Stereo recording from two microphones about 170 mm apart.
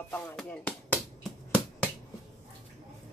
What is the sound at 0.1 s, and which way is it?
Speech, 10° left (ahead or behind).